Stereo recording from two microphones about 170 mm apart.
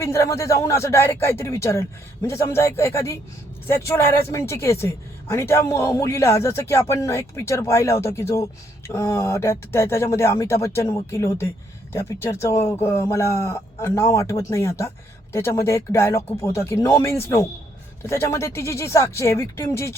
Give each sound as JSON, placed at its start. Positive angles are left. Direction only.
{"t": 0.0, "sound": "speech", "side_deg": 15}